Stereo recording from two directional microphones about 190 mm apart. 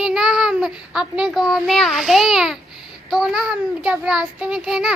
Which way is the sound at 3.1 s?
Centre (ahead or behind).